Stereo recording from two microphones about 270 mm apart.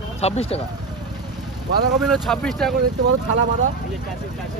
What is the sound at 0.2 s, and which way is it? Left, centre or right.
Speech, left.